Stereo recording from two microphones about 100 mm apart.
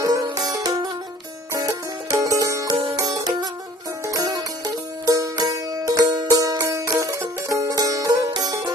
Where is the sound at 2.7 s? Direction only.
60° right (ahead or behind).